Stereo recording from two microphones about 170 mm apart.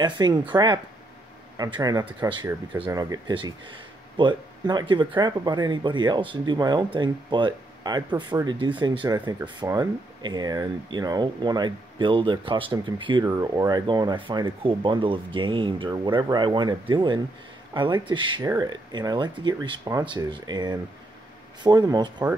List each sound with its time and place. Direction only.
0.0 s speech: 25° right (ahead or behind)